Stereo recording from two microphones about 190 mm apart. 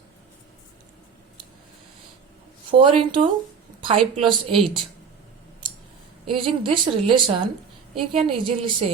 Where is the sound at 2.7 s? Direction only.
25° right (ahead or behind).